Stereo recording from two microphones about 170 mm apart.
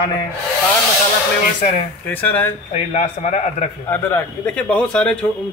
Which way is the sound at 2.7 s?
45° left (ahead or behind).